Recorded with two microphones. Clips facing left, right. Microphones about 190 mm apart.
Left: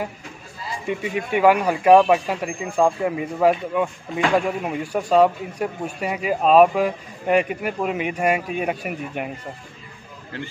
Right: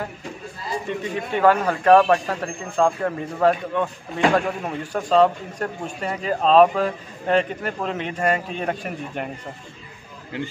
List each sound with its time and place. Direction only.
0.8 s a man's voice: 10° left (ahead or behind)
10.3 s a man's voice: 15° right (ahead or behind)